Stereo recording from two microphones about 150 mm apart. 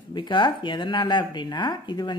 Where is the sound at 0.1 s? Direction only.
30° left (ahead or behind).